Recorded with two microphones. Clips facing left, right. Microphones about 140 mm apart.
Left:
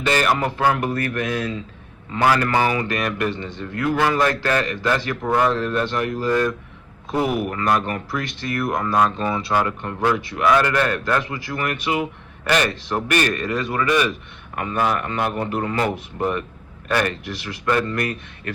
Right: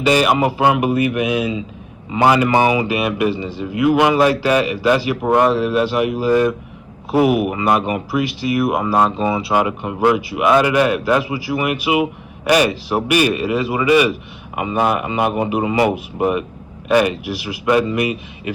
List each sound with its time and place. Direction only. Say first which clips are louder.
0.0 s a man's voice: right 5 dB; 10° right (ahead or behind)
5.2 s speech: right 4 dB; 25° right (ahead or behind)
5.5 s a man's voice: right 5 dB; 10° right (ahead or behind)